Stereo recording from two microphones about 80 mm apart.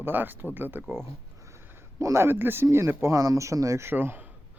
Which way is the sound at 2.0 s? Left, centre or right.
Right.